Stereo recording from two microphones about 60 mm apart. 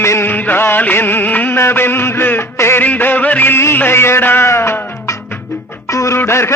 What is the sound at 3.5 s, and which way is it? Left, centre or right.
Music, left.